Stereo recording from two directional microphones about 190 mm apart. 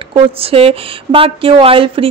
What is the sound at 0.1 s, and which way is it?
Speech, 30° right (ahead or behind).